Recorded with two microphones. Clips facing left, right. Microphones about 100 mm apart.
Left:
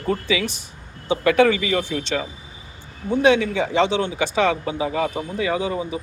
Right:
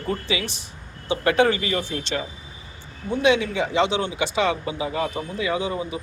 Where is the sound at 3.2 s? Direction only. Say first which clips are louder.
Left 3 dB; 50° left (ahead or behind).